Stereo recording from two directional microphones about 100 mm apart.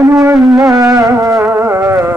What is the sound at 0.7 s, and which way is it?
Music, 35° right (ahead or behind).